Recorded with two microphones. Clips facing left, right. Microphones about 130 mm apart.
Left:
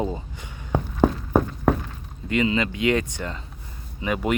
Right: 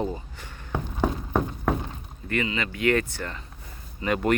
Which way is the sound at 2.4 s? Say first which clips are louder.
Left 2 dB; 25° left (ahead or behind).